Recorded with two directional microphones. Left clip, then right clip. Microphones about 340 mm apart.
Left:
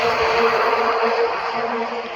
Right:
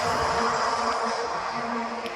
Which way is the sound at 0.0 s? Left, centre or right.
Left.